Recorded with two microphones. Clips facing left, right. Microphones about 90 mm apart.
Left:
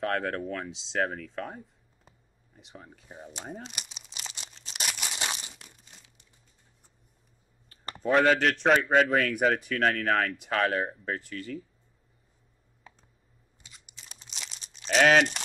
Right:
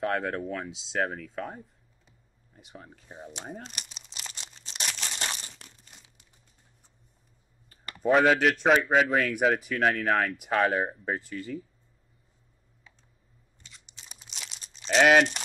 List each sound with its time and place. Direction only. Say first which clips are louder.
0.0 s speech: right 1 dB; 5° right (ahead or behind)
3.3 s crumpling: even; centre (ahead or behind)
7.9 s speech: right 1 dB; 5° right (ahead or behind)
12.9 s computer keyboard: left 6 dB; 45° left (ahead or behind)
13.6 s a sound: even; 5° left (ahead or behind)
14.0 s crumpling: even; centre (ahead or behind)